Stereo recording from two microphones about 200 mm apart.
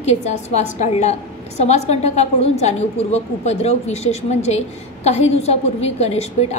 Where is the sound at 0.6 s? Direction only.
35° left (ahead or behind).